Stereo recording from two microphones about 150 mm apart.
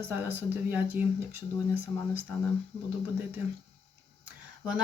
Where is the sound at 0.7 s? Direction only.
10° right (ahead or behind).